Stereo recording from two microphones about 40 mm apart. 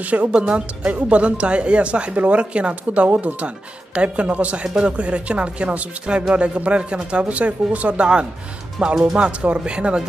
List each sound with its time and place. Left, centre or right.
0.0 s speech: right
0.3 s speech: right
8.0 s speech: right